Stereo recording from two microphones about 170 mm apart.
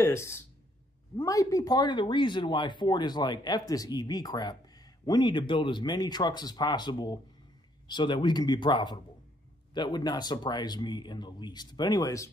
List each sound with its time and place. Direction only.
0.0 s speech: 15° left (ahead or behind)